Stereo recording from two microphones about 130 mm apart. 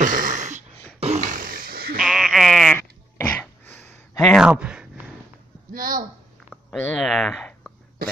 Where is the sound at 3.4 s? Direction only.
15° left (ahead or behind).